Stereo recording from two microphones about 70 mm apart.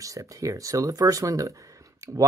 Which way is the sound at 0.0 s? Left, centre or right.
Right.